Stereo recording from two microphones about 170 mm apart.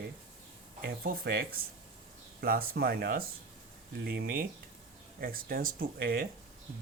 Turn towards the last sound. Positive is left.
turn(degrees=-65)  # may be behind; listen again after turning